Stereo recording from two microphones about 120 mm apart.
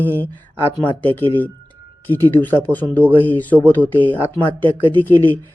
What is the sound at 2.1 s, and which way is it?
Speech, 15° left (ahead or behind).